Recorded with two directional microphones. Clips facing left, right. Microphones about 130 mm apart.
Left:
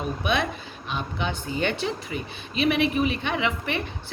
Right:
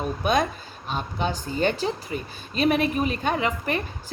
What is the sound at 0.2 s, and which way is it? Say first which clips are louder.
A woman's voice: right 4 dB; 40° right (ahead or behind).